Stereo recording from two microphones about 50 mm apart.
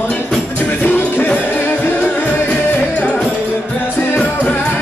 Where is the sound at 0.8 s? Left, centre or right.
Left.